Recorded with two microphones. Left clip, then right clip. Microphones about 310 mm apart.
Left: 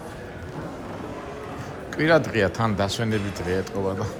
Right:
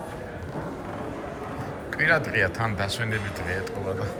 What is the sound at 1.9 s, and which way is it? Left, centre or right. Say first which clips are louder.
Speech: left 2 dB; centre.